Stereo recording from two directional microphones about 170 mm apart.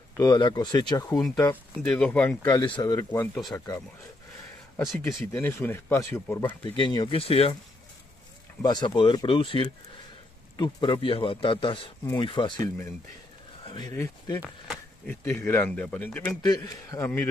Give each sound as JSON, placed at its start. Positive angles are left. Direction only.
{"t": 0.2, "sound": "speech", "side_deg": 25}
{"t": 1.5, "sound": "speech", "side_deg": 10}
{"t": 2.4, "sound": "speech", "side_deg": 25}
{"t": 4.9, "sound": "speech", "side_deg": 15}
{"t": 6.8, "sound": "a man's voice", "side_deg": 25}
{"t": 8.6, "sound": "a man's voice", "side_deg": 25}
{"t": 13.7, "sound": "speech", "side_deg": 25}
{"t": 16.4, "sound": "speech", "side_deg": 20}